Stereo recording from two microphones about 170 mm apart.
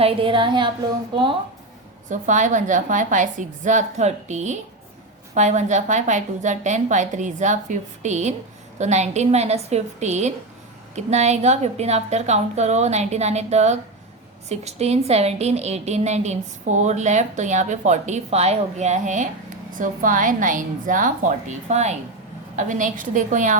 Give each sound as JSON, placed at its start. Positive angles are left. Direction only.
{"t": 0.0, "sound": "a woman's voice", "side_deg": -35}
{"t": 2.0, "sound": "a woman's voice", "side_deg": -45}